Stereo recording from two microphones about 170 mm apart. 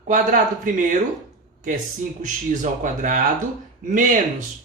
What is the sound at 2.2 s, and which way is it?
Speech, 50° right (ahead or behind).